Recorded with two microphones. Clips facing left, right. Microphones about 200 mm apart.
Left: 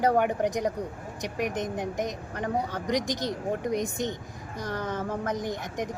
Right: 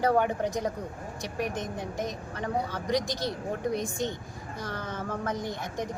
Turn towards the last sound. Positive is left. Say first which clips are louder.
# left 2 dB
turn(degrees=15)  # may be behind; listen again after turning